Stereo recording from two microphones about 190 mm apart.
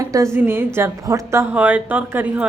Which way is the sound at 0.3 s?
10° right (ahead or behind).